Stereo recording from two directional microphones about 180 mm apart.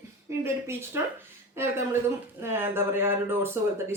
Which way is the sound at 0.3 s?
15° right (ahead or behind).